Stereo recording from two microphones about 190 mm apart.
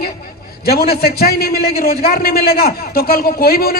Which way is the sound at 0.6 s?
55° left (ahead or behind).